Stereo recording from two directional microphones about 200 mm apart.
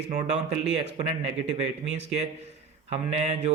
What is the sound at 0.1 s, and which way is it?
Speech, 35° right (ahead or behind).